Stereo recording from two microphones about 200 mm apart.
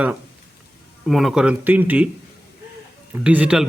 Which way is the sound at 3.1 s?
5° right (ahead or behind).